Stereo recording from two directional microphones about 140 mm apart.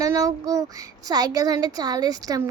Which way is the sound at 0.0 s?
25° right (ahead or behind).